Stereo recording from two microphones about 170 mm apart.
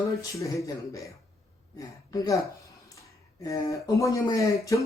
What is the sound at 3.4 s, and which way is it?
Speech, 20° left (ahead or behind).